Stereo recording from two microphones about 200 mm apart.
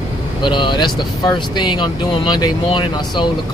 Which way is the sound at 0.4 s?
25° left (ahead or behind).